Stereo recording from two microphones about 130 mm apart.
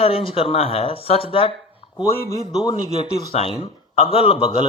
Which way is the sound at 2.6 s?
45° left (ahead or behind).